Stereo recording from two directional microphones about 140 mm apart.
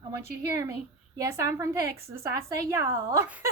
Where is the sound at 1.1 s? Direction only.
25° right (ahead or behind).